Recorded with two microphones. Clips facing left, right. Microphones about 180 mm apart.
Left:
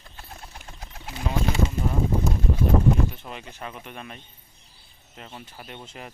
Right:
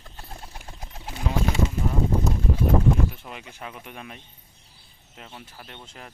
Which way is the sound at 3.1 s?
5° right (ahead or behind).